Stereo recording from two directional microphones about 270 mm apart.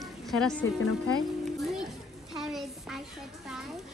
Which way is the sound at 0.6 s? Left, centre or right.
Left.